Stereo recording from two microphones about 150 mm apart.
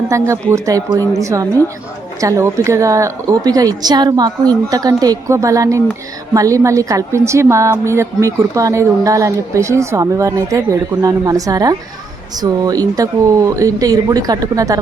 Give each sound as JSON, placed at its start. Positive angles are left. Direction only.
{"t": 0.1, "sound": "a woman's voice", "side_deg": -20}